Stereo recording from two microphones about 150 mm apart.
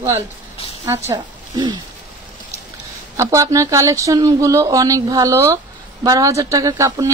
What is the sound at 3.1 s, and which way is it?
Speech, 20° right (ahead or behind).